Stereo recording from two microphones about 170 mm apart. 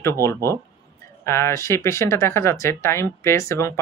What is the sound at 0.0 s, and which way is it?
Speech, 15° left (ahead or behind).